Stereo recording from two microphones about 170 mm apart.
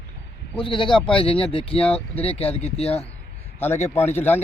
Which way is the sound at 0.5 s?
30° left (ahead or behind).